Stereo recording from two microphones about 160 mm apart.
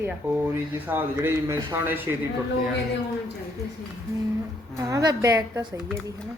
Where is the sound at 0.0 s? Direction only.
15° right (ahead or behind).